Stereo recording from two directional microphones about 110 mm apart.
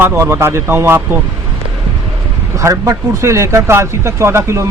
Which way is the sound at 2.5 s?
30° right (ahead or behind).